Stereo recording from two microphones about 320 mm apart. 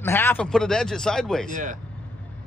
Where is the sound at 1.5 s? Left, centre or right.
Right.